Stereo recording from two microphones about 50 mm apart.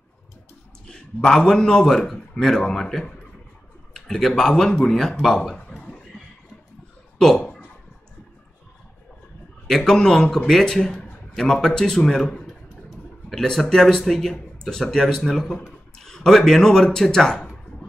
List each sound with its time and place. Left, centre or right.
0.8 s a man's voice: centre
5.5 s a sound: centre
7.2 s speech: centre
9.7 s a man's voice: centre